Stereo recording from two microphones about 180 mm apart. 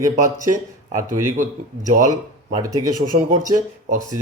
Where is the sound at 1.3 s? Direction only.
45° right (ahead or behind).